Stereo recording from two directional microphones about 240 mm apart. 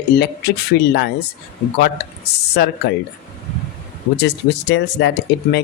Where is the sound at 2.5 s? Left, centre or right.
Left.